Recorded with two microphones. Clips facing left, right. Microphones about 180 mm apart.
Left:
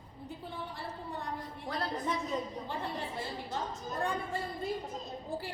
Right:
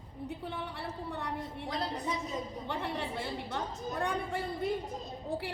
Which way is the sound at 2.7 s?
65° right (ahead or behind).